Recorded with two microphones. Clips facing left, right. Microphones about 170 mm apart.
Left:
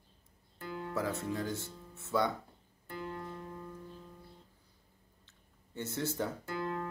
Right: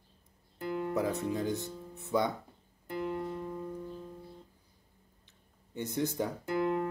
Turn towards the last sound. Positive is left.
turn(degrees=-15)  # may be behind; listen again after turning